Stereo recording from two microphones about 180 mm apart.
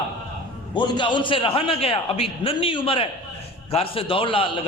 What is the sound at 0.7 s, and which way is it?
A man's voice, 25° left (ahead or behind).